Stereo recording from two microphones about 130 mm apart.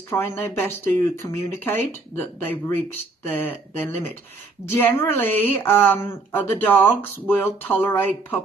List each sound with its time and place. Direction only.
0.1 s a woman's voice: 15° left (ahead or behind)